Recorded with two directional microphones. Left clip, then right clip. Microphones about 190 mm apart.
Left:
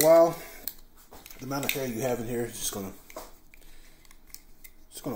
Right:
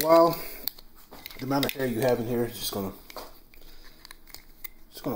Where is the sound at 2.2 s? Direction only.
10° right (ahead or behind).